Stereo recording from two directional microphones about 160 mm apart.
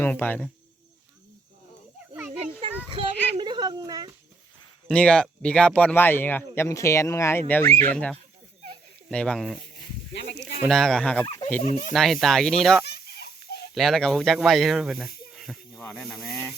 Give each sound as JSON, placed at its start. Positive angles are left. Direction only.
{"t": 0.0, "sound": "speech", "side_deg": 10}
{"t": 2.9, "sound": "a sound", "side_deg": -35}
{"t": 4.9, "sound": "speech", "side_deg": 5}
{"t": 10.7, "sound": "speech", "side_deg": 0}
{"t": 11.6, "sound": "speech", "side_deg": 50}
{"t": 11.9, "sound": "speech", "side_deg": 0}
{"t": 12.8, "sound": "a sound", "side_deg": 90}
{"t": 13.7, "sound": "speech", "side_deg": 0}
{"t": 15.8, "sound": "speech", "side_deg": 10}